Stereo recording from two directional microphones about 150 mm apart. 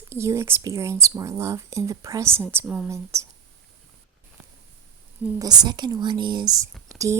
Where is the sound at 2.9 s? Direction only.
20° right (ahead or behind).